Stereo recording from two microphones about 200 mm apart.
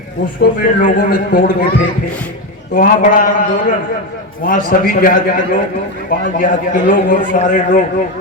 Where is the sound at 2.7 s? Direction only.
40° left (ahead or behind).